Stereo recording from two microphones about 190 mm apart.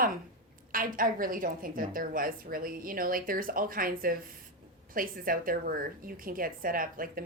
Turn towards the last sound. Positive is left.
turn(degrees=-50)  # may be behind; listen again after turning